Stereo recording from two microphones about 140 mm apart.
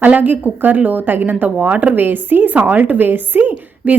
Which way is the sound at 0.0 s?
10° right (ahead or behind).